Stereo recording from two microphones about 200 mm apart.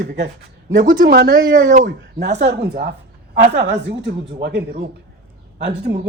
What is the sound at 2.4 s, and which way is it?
Speech, 55° right (ahead or behind).